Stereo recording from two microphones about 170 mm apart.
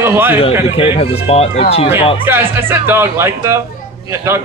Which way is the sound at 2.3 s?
15° right (ahead or behind).